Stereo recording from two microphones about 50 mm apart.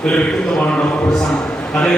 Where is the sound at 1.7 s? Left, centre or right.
Centre.